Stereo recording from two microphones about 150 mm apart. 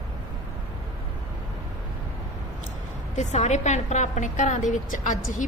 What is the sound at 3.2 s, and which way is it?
A woman's voice, 50° left (ahead or behind).